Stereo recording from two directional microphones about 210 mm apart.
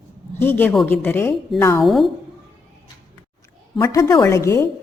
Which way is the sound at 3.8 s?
20° left (ahead or behind).